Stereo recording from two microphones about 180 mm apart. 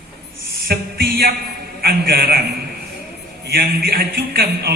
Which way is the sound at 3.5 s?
60° right (ahead or behind).